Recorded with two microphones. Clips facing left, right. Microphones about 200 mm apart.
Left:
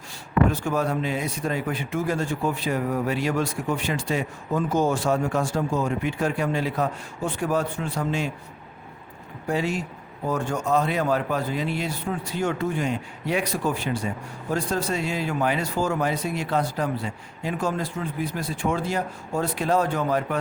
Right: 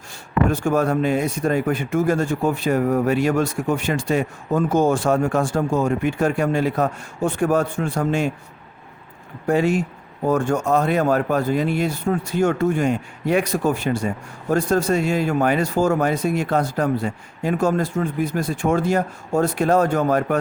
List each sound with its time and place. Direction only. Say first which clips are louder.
0.5 s speech: right 6 dB; 50° right (ahead or behind)
9.5 s speech: right 7 dB; 50° right (ahead or behind)